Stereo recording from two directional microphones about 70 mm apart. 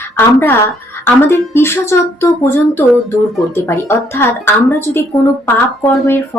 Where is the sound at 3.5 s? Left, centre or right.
Left.